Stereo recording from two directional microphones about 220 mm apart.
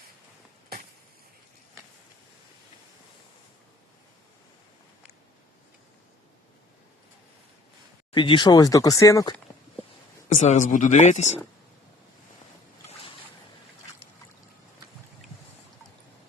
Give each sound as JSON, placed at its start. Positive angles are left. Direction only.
{"t": 8.1, "sound": "speech", "side_deg": 20}
{"t": 10.3, "sound": "speech", "side_deg": 35}